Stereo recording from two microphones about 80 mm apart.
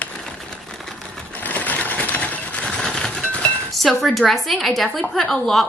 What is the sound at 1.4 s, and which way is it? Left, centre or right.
Sewing machine, centre.